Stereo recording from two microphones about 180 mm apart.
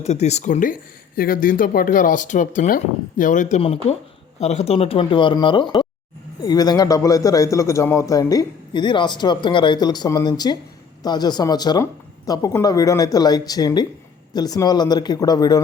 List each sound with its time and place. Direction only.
0.0 s a man's voice: 40° left (ahead or behind); by 15.6 s 20° left (ahead or behind)